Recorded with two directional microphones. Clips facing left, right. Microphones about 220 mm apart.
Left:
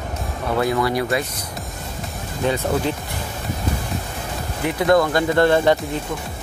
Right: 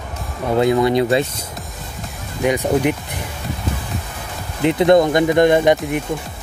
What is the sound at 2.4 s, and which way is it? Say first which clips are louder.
Speech: right 4 dB; 15° right (ahead or behind).